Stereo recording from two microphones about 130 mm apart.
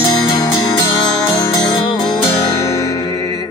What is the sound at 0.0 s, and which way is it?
Music, 30° left (ahead or behind).